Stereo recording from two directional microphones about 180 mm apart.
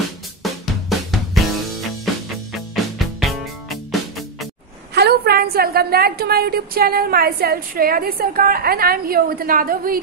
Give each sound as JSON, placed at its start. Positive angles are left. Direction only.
{"t": 0.4, "sound": "drum kit", "side_deg": 0}
{"t": 2.7, "sound": "music", "side_deg": 0}
{"t": 4.9, "sound": "a woman's voice", "side_deg": -65}